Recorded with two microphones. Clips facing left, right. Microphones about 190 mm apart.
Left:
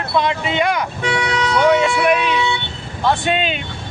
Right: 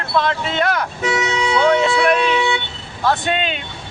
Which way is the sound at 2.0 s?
10° left (ahead or behind).